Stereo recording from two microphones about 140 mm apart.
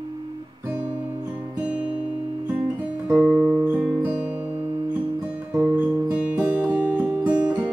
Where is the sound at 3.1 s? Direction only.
10° right (ahead or behind).